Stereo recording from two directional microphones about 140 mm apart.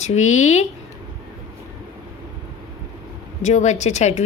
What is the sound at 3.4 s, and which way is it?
Speech, 55° left (ahead or behind).